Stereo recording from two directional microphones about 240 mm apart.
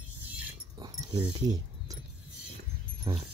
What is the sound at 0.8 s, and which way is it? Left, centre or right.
Dog, centre.